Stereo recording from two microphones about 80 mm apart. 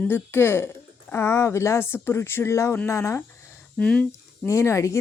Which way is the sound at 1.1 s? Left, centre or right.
Left.